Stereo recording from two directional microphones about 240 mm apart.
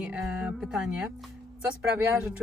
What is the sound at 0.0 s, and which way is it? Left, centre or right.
Speech, centre.